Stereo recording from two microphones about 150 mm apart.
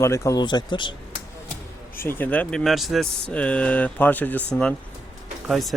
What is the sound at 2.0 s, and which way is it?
Speech, 15° left (ahead or behind).